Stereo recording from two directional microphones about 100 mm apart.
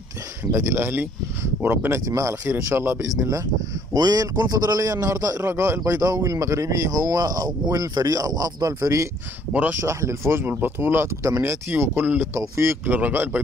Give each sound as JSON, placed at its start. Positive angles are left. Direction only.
{"t": 0.5, "sound": "speech", "side_deg": -25}
{"t": 2.0, "sound": "speech", "side_deg": -35}
{"t": 2.4, "sound": "speech", "side_deg": -20}
{"t": 9.5, "sound": "speech", "side_deg": -15}
{"t": 9.8, "sound": "speech", "side_deg": -30}